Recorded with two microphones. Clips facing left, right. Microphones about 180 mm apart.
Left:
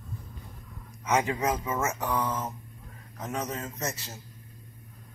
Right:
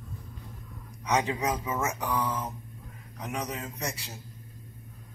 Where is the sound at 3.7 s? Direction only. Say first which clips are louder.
Left 1 dB; 5° left (ahead or behind).